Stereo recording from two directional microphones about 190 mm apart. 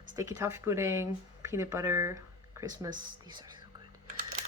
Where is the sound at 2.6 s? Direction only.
15° right (ahead or behind).